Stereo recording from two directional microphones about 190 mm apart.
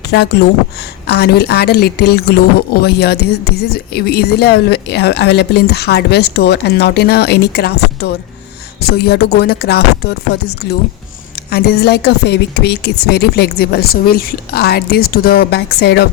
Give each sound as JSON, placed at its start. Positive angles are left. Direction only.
{"t": 0.1, "sound": "speech", "side_deg": 60}